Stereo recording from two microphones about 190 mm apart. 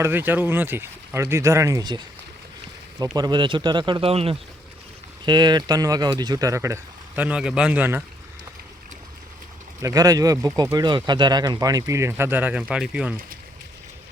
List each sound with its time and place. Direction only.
0.0 s speech: 10° right (ahead or behind)
3.2 s speech: 25° right (ahead or behind)
9.8 s speech: 20° right (ahead or behind)